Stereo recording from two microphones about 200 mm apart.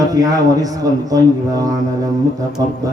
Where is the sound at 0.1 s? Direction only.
20° right (ahead or behind).